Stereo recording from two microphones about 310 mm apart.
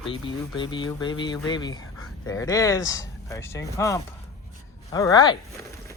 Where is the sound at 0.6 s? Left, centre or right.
Centre.